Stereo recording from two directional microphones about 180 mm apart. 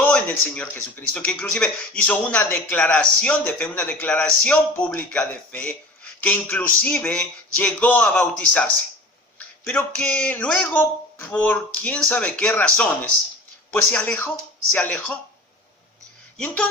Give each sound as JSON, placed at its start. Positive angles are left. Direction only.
{"t": 0.0, "sound": "a sound", "side_deg": 10}
{"t": 1.1, "sound": "speech", "side_deg": 5}
{"t": 13.9, "sound": "speech", "side_deg": 10}